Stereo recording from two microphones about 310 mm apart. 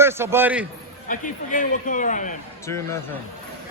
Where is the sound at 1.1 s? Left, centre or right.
Left.